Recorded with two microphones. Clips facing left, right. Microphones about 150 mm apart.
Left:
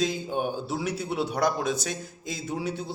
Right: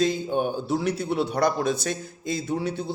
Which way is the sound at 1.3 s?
10° left (ahead or behind).